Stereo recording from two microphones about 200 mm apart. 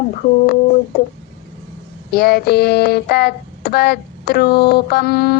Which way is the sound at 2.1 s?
50° left (ahead or behind).